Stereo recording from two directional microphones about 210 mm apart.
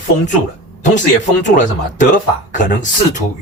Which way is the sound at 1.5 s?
40° left (ahead or behind).